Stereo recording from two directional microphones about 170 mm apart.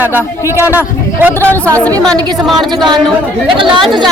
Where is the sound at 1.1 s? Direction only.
10° right (ahead or behind).